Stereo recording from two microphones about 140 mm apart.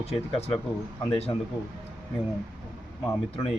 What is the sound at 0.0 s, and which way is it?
Speech, 50° left (ahead or behind).